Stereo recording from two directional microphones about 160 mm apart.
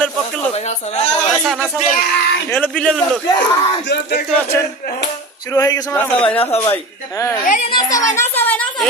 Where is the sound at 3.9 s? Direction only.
90° left.